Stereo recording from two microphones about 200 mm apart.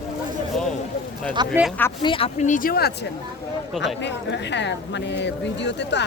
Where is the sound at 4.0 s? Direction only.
60° left (ahead or behind).